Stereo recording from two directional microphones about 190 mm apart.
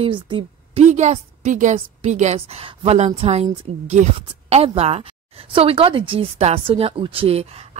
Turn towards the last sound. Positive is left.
turn(degrees=-30)  # may be behind; listen again after turning